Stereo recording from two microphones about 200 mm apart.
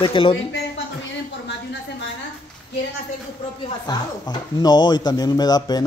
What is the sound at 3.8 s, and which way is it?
Speech, 20° left (ahead or behind).